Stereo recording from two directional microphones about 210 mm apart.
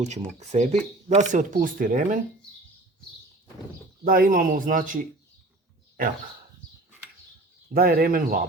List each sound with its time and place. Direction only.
0.0 s speech: 35° right (ahead or behind)
4.0 s speech: 40° right (ahead or behind)
7.7 s speech: 45° right (ahead or behind)